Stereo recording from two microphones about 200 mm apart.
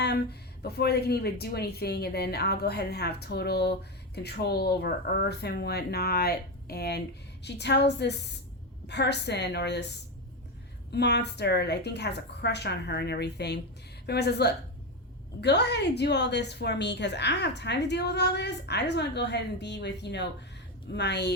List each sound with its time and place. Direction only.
0.6 s a woman's voice: 55° left (ahead or behind)
10.9 s a woman's voice: 60° left (ahead or behind)